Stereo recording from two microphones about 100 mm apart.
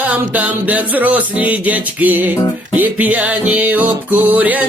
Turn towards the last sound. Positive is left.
turn(degrees=-15)  # may be behind; listen again after turning